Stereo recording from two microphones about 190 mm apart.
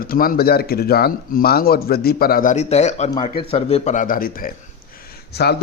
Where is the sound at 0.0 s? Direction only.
50° left (ahead or behind).